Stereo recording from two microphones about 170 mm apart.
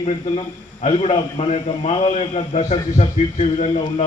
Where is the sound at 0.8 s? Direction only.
35° left (ahead or behind).